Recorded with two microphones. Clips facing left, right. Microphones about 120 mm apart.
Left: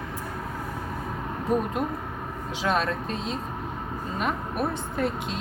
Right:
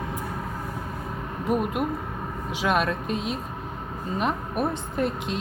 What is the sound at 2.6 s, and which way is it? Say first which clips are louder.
Speech: right 2 dB; 15° right (ahead or behind).